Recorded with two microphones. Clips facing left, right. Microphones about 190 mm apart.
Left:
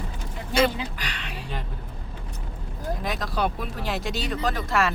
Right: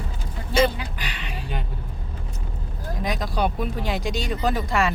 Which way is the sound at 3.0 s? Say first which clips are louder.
Right 3 dB; centre (ahead or behind).